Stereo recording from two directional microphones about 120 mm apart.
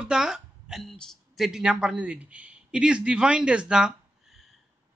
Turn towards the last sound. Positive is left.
turn(degrees=-5)  # may be behind; listen again after turning